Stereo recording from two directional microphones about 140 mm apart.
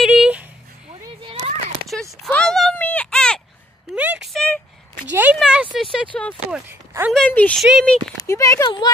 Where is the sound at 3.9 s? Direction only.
5° right (ahead or behind).